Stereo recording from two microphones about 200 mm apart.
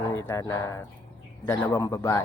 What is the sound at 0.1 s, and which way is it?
Speech, 15° left (ahead or behind).